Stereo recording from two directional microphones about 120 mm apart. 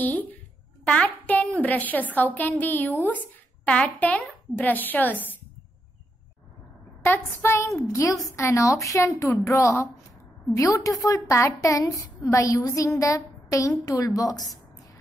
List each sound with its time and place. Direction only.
0.0 s a woman's voice: 15° left (ahead or behind)
7.0 s a woman's voice: 20° left (ahead or behind)